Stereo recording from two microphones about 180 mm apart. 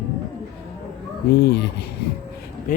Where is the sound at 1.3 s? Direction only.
65° left (ahead or behind).